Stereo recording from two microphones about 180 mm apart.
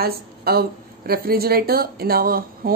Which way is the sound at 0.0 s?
60° right (ahead or behind).